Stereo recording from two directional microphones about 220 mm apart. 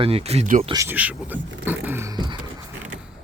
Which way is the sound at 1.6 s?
10° right (ahead or behind).